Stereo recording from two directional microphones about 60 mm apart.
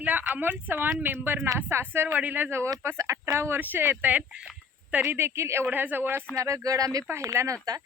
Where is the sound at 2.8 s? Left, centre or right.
Right.